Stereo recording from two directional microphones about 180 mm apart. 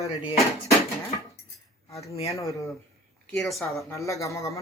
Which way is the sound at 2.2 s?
15° left (ahead or behind).